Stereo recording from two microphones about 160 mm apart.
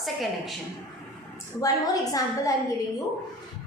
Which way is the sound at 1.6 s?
20° left (ahead or behind).